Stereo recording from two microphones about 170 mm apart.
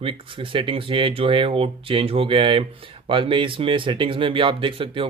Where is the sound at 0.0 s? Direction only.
30° right (ahead or behind).